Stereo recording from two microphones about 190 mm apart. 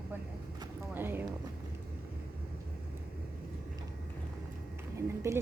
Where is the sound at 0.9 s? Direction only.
10° right (ahead or behind).